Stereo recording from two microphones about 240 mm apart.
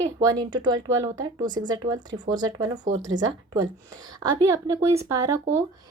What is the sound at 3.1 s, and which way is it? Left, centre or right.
Speech, right.